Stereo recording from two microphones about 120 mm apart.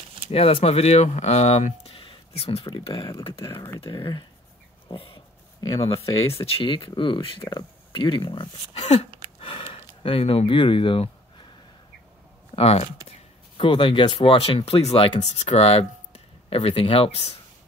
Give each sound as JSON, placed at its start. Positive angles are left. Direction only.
{"t": 0.3, "sound": "speech", "side_deg": 55}
{"t": 4.8, "sound": "a sound", "side_deg": 50}
{"t": 5.8, "sound": "speech", "side_deg": 50}
{"t": 9.4, "sound": "a sound", "side_deg": 45}
{"t": 12.5, "sound": "speech", "side_deg": 55}
{"t": 13.6, "sound": "speech", "side_deg": 45}